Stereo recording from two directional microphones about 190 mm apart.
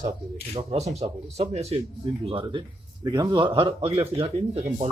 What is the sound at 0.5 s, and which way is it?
A man's voice, 35° right (ahead or behind).